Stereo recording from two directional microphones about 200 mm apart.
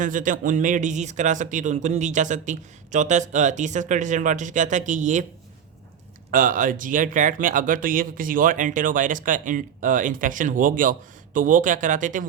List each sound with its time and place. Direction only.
0.0 s speech: 40° right (ahead or behind)
6.3 s speech: 45° right (ahead or behind)